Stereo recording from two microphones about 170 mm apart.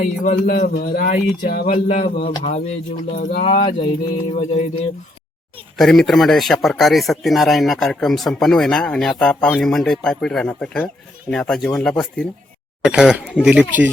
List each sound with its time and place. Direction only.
0.0 s a man's voice: 55° left (ahead or behind)
1.6 s a man's voice: 45° left (ahead or behind)
3.2 s speech: 60° left (ahead or behind)
3.4 s speech: 35° left (ahead or behind)
5.7 s speech: centre (ahead or behind)